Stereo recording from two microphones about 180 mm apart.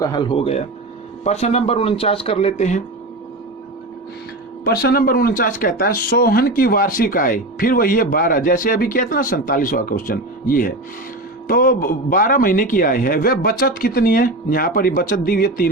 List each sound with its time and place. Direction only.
0.0 s speech: 25° left (ahead or behind)
4.6 s speech: 60° left (ahead or behind)